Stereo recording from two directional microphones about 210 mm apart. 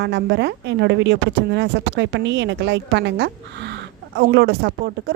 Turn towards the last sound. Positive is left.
turn(degrees=-55)  # may be behind; listen again after turning